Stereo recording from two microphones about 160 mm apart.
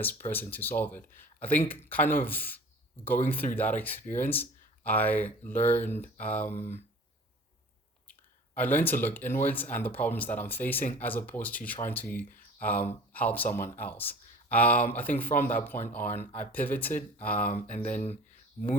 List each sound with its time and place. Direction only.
0.3 s speech: 10° left (ahead or behind)
8.5 s speech: 10° left (ahead or behind)
17.8 s speech: 45° left (ahead or behind)